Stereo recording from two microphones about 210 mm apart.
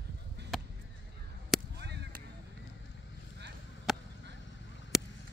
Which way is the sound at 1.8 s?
55° right (ahead or behind).